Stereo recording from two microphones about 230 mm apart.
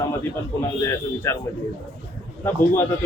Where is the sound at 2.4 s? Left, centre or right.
Centre.